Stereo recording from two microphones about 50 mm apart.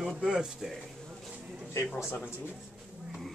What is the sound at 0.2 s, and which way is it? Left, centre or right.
Speech, centre.